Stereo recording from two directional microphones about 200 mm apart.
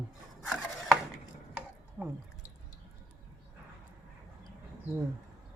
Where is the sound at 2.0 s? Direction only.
10° right (ahead or behind).